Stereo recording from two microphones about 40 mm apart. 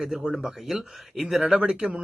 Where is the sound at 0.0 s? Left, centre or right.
Centre.